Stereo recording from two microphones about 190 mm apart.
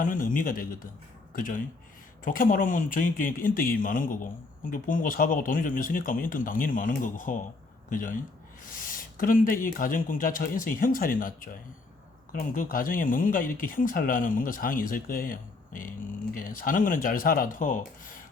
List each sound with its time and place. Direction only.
0.0 s speech: 45° left (ahead or behind)